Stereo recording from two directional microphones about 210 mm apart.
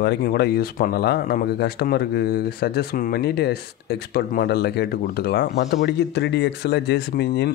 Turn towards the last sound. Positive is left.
turn(degrees=50)  # may be behind; listen again after turning